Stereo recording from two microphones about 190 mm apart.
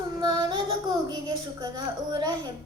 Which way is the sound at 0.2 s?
20° right (ahead or behind).